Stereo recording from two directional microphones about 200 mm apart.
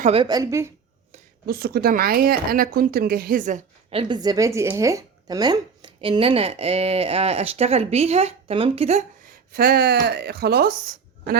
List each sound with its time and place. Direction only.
0.0 s speech: 30° right (ahead or behind)
1.5 s speech: 50° right (ahead or behind); by 9.0 s 30° right (ahead or behind)
9.5 s speech: 50° right (ahead or behind)